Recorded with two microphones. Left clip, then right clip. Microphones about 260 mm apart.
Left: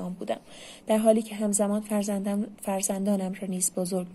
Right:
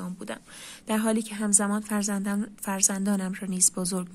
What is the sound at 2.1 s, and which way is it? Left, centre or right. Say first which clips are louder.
Speech: left 1 dB; right.